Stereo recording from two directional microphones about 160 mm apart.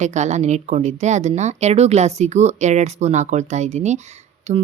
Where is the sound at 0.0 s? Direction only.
45° right (ahead or behind).